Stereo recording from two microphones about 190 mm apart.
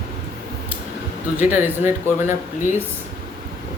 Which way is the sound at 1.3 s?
10° right (ahead or behind).